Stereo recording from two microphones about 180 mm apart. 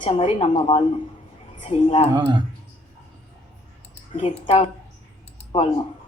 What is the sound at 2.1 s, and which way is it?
Speech, 25° right (ahead or behind).